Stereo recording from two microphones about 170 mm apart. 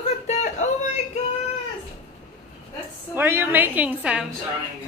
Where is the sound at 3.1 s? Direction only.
15° right (ahead or behind).